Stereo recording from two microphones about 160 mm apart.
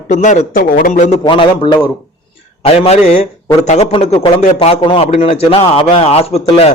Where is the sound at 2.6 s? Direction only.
40° left (ahead or behind).